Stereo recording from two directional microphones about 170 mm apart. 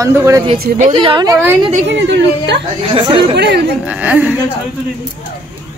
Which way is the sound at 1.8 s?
90° right.